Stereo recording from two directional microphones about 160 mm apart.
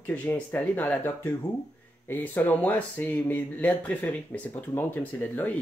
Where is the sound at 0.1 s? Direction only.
10° left (ahead or behind).